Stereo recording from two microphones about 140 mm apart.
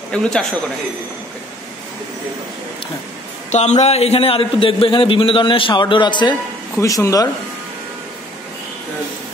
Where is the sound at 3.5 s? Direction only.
55° left (ahead or behind); by 7.3 s 25° left (ahead or behind).